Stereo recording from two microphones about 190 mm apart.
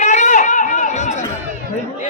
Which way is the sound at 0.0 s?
40° left (ahead or behind).